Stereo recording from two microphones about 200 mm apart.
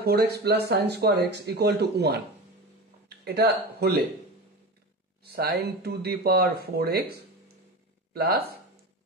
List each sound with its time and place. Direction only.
0.0 s speech: 50° right (ahead or behind)
5.2 s speech: 50° right (ahead or behind)
8.1 s speech: 50° right (ahead or behind)